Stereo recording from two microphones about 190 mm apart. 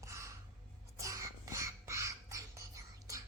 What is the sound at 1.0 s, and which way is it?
Music, 15° right (ahead or behind).